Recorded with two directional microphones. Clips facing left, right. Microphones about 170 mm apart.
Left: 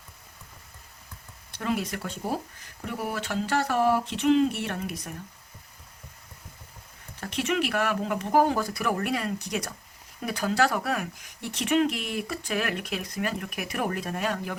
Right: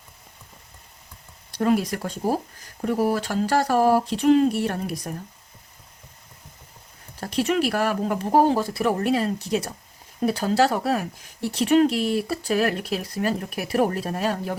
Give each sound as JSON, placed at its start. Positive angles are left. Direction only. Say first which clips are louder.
{"t": 1.5, "sound": "speech", "louder": "right 8 dB", "side_deg": -40}
{"t": 7.2, "sound": "speech", "louder": "right 5 dB", "side_deg": -35}